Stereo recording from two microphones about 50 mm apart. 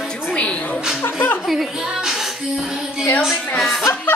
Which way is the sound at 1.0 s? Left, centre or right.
Left.